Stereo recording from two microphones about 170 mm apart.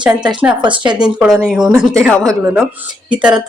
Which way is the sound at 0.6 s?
25° right (ahead or behind).